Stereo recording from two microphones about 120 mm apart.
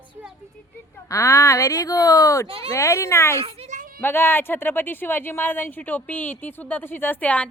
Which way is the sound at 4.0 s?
20° left (ahead or behind).